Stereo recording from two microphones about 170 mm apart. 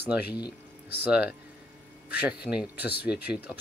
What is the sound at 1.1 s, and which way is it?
Speech, 5° right (ahead or behind).